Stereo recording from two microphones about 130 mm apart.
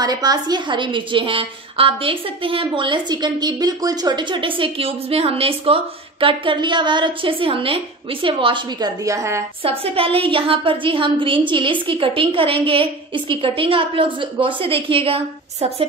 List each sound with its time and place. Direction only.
0.0 s a woman's voice: 30° right (ahead or behind)
9.6 s a woman's voice: 45° right (ahead or behind)